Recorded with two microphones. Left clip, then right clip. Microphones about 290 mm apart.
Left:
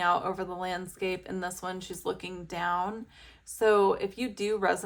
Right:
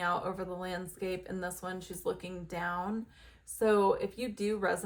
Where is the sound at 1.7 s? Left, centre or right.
Centre.